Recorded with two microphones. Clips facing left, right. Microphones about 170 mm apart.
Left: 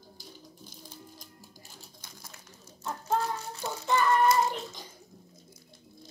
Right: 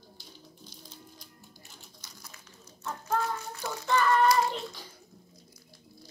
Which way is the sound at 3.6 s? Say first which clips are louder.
Even; 15° left (ahead or behind).